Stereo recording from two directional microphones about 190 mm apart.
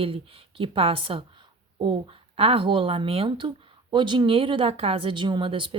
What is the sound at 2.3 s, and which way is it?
Speech, 30° right (ahead or behind).